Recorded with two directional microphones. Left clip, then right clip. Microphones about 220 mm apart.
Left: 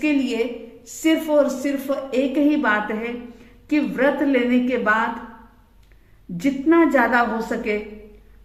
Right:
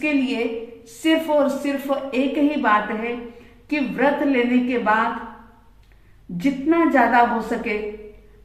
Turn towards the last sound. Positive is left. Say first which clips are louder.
# right 1 dB
turn(degrees=50)  # may be behind; listen again after turning